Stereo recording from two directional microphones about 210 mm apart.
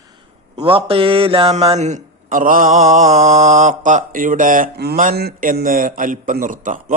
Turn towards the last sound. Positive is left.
turn(degrees=-40)  # may be behind; listen again after turning